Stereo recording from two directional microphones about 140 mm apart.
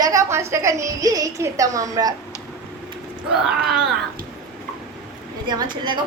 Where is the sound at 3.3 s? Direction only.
5° right (ahead or behind).